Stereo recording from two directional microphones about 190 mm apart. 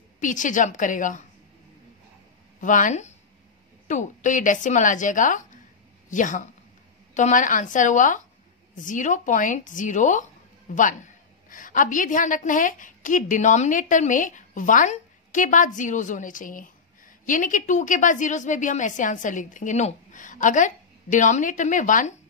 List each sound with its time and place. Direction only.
0.2 s a woman's voice: 40° left (ahead or behind)
2.6 s a woman's voice: 40° left (ahead or behind)